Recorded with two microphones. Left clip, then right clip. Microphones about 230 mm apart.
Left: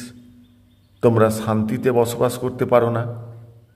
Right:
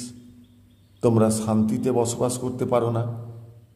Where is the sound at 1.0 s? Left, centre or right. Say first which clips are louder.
Left 5 dB; left.